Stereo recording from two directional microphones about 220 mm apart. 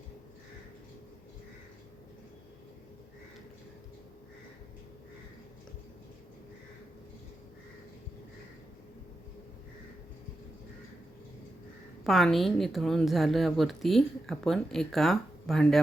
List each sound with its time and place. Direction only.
12.0 s a woman's voice: centre (ahead or behind)